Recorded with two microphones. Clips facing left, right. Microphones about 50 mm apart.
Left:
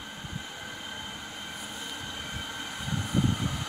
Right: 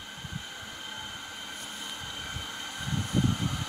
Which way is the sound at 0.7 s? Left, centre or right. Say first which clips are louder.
Left 1 dB; centre.